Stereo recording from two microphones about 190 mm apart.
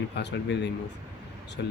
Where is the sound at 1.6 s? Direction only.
70° left (ahead or behind).